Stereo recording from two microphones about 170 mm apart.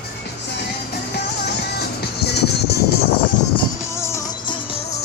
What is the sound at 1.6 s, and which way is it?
Music, 75° left (ahead or behind).